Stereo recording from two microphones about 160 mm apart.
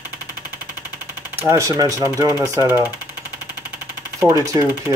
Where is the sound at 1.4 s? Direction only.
20° right (ahead or behind).